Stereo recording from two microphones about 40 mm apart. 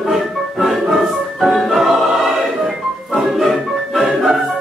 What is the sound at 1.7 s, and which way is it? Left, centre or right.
Opera, centre.